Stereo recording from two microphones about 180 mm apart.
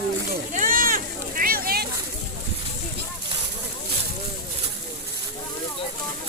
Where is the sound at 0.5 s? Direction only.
50° right (ahead or behind).